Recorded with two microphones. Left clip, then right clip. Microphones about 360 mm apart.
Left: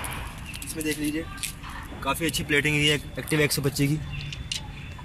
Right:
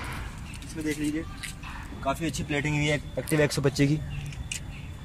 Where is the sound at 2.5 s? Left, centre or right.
Centre.